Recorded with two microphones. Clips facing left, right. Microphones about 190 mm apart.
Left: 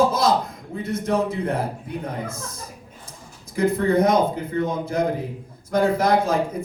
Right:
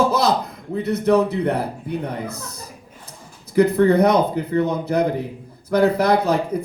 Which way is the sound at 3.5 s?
70° right (ahead or behind).